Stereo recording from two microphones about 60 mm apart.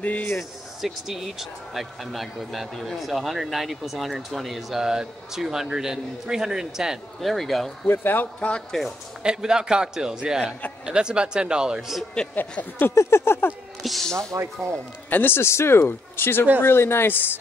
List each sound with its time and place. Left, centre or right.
0.0 s speech: left
0.4 s speech: centre
7.8 s speech: left
8.4 s speech: centre
9.2 s speech: centre
12.4 s speech: left
12.9 s a sound: left
13.8 s speech: centre
14.4 s speech: right
15.0 s speech: left